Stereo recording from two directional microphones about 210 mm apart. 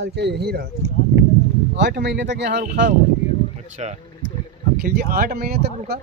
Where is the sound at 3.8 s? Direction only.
30° right (ahead or behind).